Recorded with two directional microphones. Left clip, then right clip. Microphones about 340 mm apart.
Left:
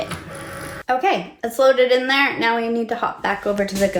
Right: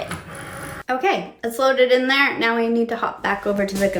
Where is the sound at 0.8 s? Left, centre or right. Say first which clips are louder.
Left 2 dB; centre.